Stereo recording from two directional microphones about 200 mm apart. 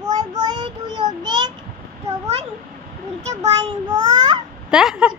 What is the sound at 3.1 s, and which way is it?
A child's voice, 30° right (ahead or behind).